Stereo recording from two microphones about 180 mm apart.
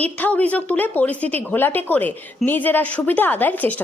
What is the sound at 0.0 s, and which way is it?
A woman's voice, 10° left (ahead or behind).